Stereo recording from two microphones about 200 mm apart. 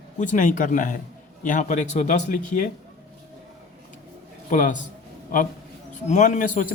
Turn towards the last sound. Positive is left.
turn(degrees=40)  # may be behind; listen again after turning